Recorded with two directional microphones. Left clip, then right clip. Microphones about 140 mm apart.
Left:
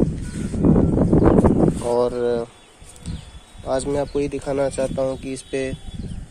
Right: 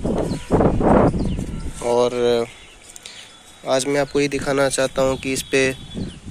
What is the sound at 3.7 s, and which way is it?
Speech, 5° left (ahead or behind).